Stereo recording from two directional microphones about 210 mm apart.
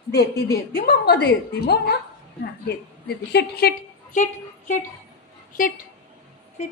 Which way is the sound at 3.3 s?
50° left (ahead or behind).